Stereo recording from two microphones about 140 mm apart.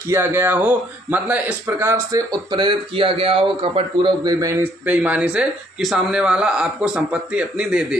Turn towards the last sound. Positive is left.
turn(degrees=-5)  # may be behind; listen again after turning